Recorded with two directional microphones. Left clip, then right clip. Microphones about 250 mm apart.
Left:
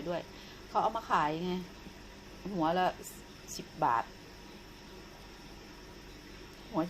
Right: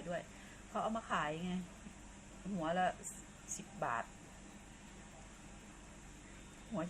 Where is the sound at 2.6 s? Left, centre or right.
Left.